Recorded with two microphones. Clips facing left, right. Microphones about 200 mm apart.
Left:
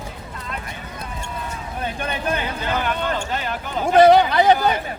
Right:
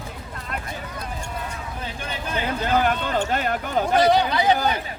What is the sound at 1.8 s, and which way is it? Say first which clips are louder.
Speech: left 8 dB; 60° left (ahead or behind).